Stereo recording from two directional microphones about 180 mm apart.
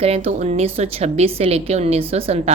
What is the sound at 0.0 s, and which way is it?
Speech, 35° right (ahead or behind).